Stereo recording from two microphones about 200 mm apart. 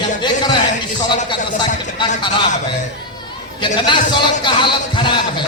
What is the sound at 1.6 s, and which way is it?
Speech, 25° left (ahead or behind).